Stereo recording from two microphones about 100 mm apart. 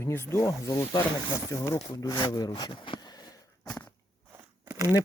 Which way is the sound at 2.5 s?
55° left (ahead or behind).